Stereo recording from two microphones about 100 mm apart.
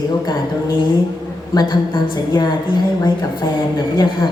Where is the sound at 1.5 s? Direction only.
45° left (ahead or behind).